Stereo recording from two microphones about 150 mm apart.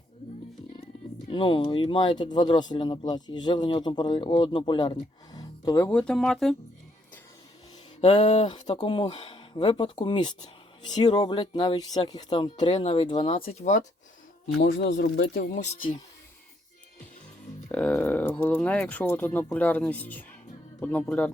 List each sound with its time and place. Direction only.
1.3 s speech: 35° left (ahead or behind)
5.9 s speech: 5° left (ahead or behind)
8.0 s a sound: 45° left (ahead or behind)
8.6 s speech: 30° left (ahead or behind); by 13.8 s 50° left (ahead or behind)
14.8 s speech: 90° left; by 15.6 s 70° left (ahead or behind)
15.7 s speech: 30° left (ahead or behind)
17.7 s speech: 10° left (ahead or behind)